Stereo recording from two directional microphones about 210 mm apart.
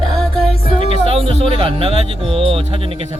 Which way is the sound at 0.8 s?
25° right (ahead or behind).